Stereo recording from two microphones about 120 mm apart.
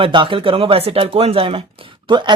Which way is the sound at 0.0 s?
45° right (ahead or behind).